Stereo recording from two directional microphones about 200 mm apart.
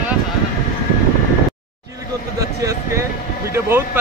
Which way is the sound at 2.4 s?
15° right (ahead or behind).